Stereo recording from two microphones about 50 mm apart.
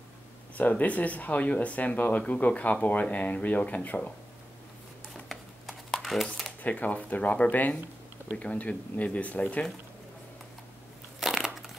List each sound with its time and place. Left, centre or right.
0.6 s speech: left
5.1 s a sound: centre
6.6 s speech: left
11.1 s crushing: centre